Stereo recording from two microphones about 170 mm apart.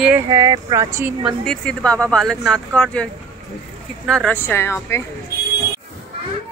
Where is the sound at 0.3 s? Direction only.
20° right (ahead or behind).